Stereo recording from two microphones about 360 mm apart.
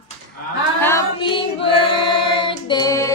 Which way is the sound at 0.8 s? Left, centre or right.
Centre.